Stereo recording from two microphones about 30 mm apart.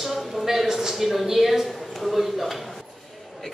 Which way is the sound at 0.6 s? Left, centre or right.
Centre.